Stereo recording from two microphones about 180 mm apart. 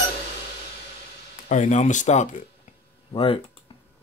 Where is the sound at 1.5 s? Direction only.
40° left (ahead or behind).